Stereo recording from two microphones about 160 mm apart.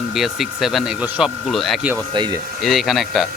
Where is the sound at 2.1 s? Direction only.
30° right (ahead or behind).